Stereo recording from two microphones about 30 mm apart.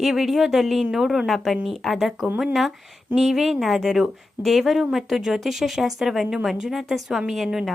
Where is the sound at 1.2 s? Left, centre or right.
Centre.